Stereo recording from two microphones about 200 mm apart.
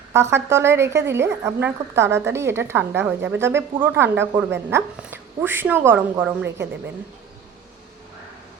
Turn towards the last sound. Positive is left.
turn(degrees=-10)  # may be behind; listen again after turning